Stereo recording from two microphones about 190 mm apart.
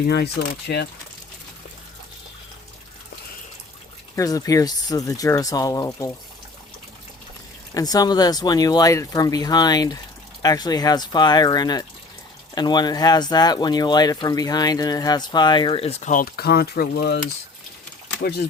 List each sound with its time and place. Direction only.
0.0 s speech: 55° left (ahead or behind)
4.1 s speech: 20° left (ahead or behind)
7.7 s speech: 20° left (ahead or behind); by 17.2 s 60° left (ahead or behind)
18.2 s speech: 55° left (ahead or behind)